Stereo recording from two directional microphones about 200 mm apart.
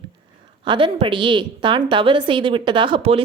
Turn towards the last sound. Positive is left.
turn(degrees=-25)  # may be behind; listen again after turning